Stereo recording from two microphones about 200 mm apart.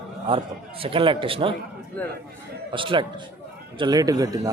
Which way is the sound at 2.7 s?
25° right (ahead or behind).